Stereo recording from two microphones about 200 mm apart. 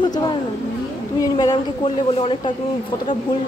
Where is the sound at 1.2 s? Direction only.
20° left (ahead or behind).